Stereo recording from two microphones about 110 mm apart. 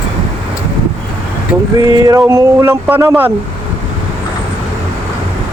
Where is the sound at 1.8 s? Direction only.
35° right (ahead or behind); by 3.3 s 20° right (ahead or behind).